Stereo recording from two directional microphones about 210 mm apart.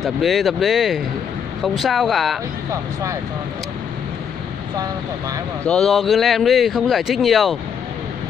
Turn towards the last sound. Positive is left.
turn(degrees=0)  # may be behind; listen again after turning